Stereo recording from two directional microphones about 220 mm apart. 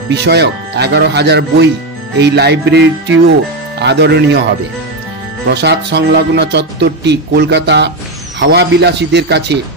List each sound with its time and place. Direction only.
0.1 s speech: 50° right (ahead or behind)
5.5 s speech: 50° right (ahead or behind)